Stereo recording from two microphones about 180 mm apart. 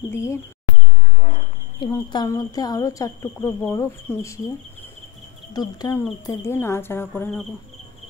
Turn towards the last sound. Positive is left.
turn(degrees=0)  # may be behind; listen again after turning